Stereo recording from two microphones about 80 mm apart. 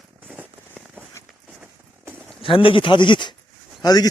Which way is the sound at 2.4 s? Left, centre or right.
Left.